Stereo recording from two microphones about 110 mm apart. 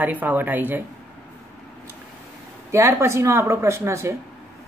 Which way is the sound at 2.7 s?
25° right (ahead or behind).